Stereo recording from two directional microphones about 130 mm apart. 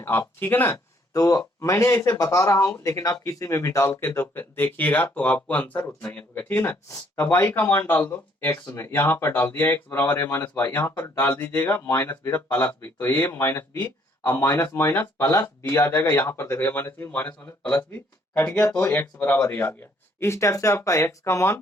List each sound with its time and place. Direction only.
0.0 s speech: 15° left (ahead or behind)